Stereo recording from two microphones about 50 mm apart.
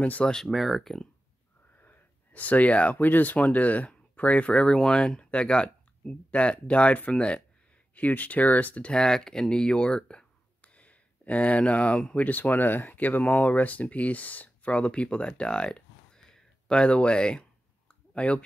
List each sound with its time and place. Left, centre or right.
0.2 s speech: centre
0.5 s speech: centre
1.8 s speech: left
7.9 s speech: left
8.9 s speech: centre
12.3 s speech: left